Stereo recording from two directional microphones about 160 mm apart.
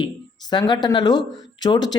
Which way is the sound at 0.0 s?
25° left (ahead or behind).